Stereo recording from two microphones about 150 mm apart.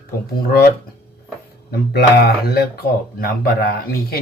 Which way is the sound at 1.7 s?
90° left.